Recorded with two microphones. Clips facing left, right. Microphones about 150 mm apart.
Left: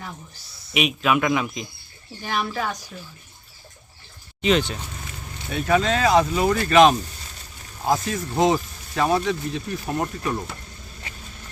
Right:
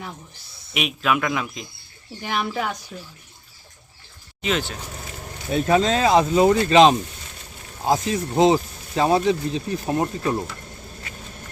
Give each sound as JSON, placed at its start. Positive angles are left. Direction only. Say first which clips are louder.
{"t": 0.7, "sound": "speech", "louder": "left 2 dB", "side_deg": 0}
{"t": 2.2, "sound": "speech", "louder": "right 1 dB", "side_deg": -15}
{"t": 4.4, "sound": "speech", "louder": "left 4 dB", "side_deg": 0}
{"t": 5.5, "sound": "speech", "louder": "right 2 dB", "side_deg": -30}